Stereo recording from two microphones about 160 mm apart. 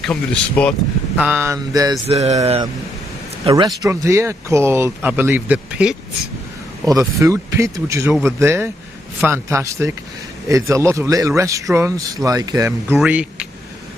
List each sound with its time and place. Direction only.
0.0 s speech: 5° left (ahead or behind)
1.1 s speech: 10° right (ahead or behind)
2.0 s a sound: 40° right (ahead or behind)
3.4 s speech: 25° right (ahead or behind); by 5.9 s 10° right (ahead or behind)
6.8 s speech: 20° right (ahead or behind)
8.1 s speech: centre (ahead or behind)
8.4 s speech: 15° right (ahead or behind)
12.9 s speech: 5° right (ahead or behind)